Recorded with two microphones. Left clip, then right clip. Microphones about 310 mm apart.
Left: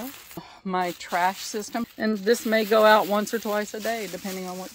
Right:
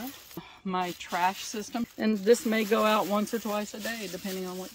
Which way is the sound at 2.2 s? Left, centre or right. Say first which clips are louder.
Left 2 dB; centre.